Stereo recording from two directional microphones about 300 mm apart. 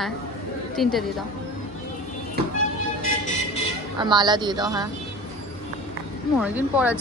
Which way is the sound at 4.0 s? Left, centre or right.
Centre.